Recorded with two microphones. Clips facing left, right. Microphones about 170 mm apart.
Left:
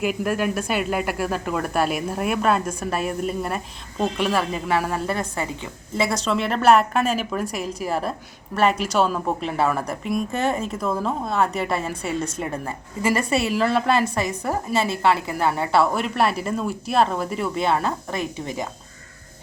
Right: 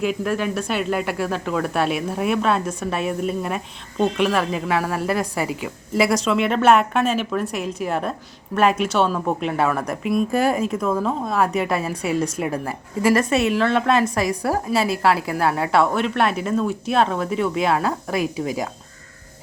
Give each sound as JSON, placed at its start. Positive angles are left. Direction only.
{"t": 0.0, "sound": "a woman's voice", "side_deg": 10}